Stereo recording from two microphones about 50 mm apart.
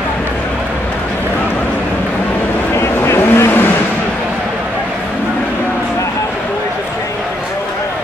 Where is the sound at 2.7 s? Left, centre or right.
Left.